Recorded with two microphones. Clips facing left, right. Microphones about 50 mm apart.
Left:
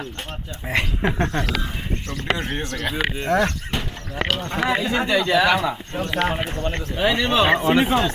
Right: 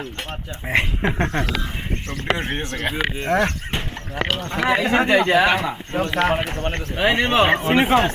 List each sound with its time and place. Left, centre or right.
0.7 s speech: right
4.5 s speech: right